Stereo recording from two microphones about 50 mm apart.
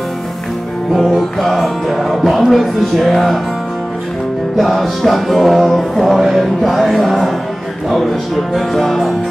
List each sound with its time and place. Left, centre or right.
0.9 s music: centre
4.6 s music: centre